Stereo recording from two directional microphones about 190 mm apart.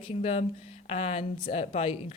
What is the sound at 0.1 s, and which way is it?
A woman's voice, 35° left (ahead or behind).